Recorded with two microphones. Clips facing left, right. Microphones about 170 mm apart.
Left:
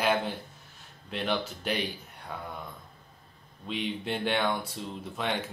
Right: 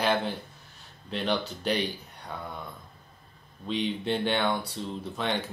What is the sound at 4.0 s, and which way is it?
Speech, centre (ahead or behind).